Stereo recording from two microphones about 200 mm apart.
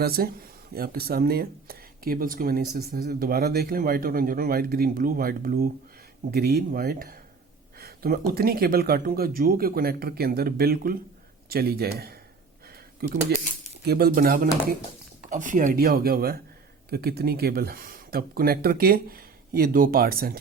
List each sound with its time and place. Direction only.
0.0 s a man's voice: 50° right (ahead or behind)